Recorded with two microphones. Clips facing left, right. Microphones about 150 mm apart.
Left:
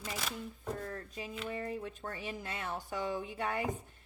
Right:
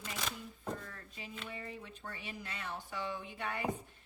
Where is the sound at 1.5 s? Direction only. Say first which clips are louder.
Left 7 dB; 45° left (ahead or behind).